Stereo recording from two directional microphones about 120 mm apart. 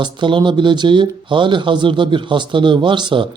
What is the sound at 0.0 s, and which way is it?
A man's voice, 40° right (ahead or behind).